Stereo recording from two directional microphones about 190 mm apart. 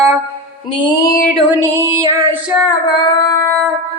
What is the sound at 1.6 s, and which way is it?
Female singing, 15° right (ahead or behind).